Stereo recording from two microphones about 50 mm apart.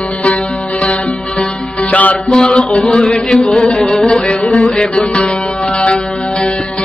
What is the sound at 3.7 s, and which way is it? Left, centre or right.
Music, centre.